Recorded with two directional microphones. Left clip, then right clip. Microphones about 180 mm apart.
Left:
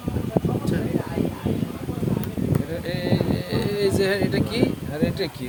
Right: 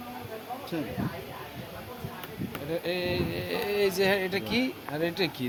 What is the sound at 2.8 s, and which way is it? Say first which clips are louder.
Speech: left 3 dB; centre (ahead or behind).